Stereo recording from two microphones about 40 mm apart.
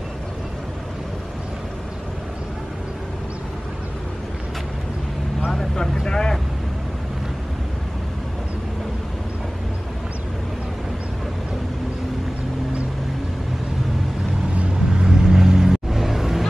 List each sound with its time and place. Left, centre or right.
5.8 s speech: centre
15.0 s vehicle: centre